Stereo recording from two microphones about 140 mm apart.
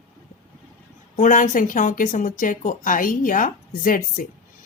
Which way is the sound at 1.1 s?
65° left (ahead or behind).